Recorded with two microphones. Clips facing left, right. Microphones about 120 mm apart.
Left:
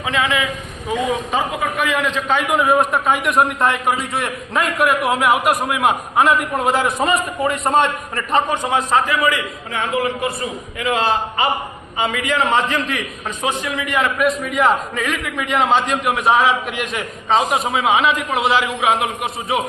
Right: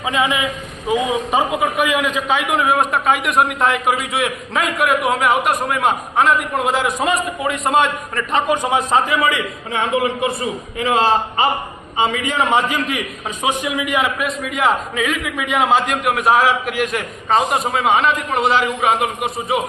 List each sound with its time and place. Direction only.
0.0 s a man's voice: 20° right (ahead or behind); by 8.4 s centre (ahead or behind)
8.4 s a man's voice: 15° right (ahead or behind)
10.8 s a man's voice: 30° right (ahead or behind); by 14.1 s 10° right (ahead or behind)
14.2 s a man's voice: centre (ahead or behind)